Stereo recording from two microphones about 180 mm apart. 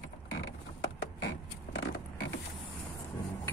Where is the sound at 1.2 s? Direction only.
90° left.